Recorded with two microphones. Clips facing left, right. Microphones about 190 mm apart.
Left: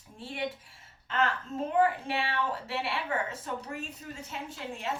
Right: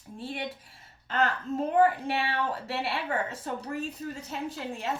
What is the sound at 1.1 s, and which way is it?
A woman's voice, 35° right (ahead or behind).